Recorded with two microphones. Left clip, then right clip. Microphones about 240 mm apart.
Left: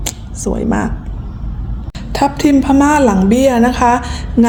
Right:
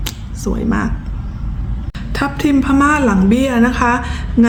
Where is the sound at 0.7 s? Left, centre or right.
Right.